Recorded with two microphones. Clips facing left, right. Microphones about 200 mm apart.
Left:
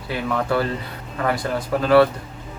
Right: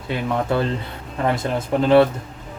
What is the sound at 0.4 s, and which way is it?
Speech, 20° right (ahead or behind).